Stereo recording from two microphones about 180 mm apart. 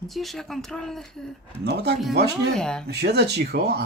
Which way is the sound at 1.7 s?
65° right (ahead or behind).